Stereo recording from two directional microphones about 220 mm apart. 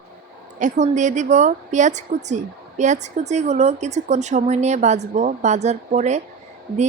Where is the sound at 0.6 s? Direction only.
35° right (ahead or behind).